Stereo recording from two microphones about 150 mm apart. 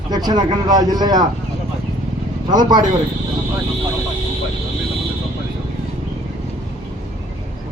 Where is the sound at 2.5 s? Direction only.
30° right (ahead or behind).